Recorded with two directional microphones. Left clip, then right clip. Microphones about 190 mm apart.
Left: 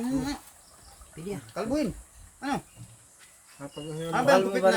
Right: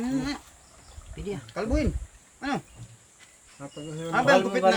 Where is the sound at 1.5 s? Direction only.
15° right (ahead or behind).